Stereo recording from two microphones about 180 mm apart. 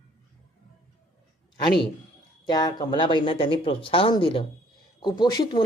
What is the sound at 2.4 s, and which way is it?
Speech, 25° left (ahead or behind).